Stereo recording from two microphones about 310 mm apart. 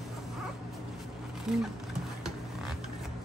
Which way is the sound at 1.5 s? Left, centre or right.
Centre.